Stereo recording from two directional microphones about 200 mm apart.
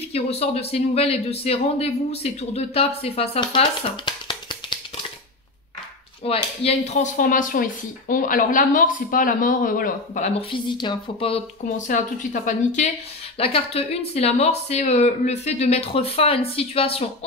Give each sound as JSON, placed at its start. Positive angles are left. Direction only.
{"t": 0.1, "sound": "speech", "side_deg": 30}
{"t": 6.2, "sound": "speech", "side_deg": 30}
{"t": 10.5, "sound": "speech", "side_deg": 25}
{"t": 11.6, "sound": "speech", "side_deg": 40}